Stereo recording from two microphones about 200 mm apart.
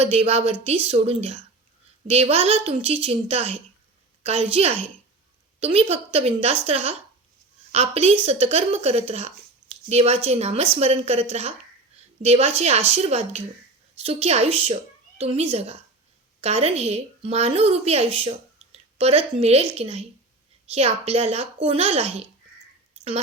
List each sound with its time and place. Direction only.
0.0 s a woman's voice: 30° right (ahead or behind)